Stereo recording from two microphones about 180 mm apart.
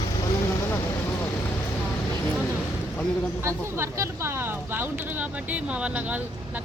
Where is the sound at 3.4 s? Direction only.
15° right (ahead or behind).